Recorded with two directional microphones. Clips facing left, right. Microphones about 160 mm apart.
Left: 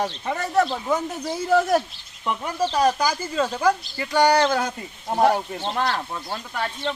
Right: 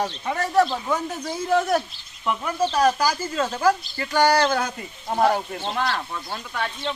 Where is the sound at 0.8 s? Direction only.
5° left (ahead or behind).